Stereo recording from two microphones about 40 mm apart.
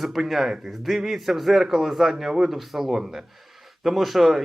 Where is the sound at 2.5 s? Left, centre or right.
Centre.